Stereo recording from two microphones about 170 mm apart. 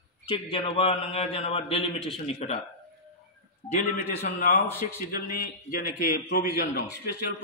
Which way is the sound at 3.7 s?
50° left (ahead or behind).